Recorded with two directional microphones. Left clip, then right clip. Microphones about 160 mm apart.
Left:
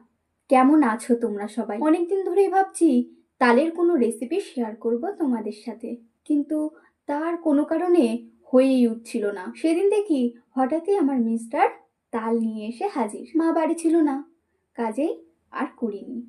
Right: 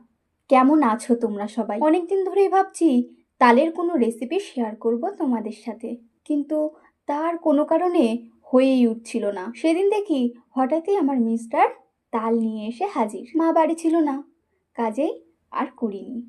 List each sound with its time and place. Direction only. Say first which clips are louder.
0.4 s a woman's voice: right 1 dB; 20° right (ahead or behind)